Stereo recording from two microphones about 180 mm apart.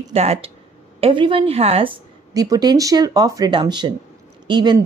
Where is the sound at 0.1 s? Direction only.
35° right (ahead or behind).